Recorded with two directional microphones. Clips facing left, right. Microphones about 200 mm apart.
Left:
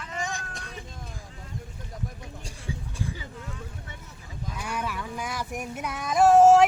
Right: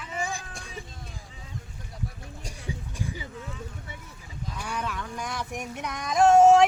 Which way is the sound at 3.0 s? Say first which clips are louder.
Even; 15° right (ahead or behind).